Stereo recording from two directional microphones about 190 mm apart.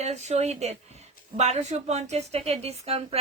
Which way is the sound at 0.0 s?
35° right (ahead or behind).